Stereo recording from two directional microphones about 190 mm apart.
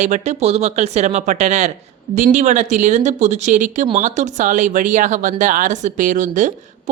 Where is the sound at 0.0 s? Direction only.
40° right (ahead or behind).